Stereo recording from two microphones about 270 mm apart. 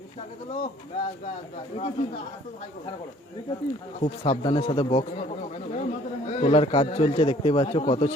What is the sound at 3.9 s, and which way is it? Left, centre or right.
A man's voice, left.